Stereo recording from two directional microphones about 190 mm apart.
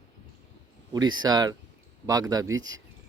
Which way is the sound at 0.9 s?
20° right (ahead or behind).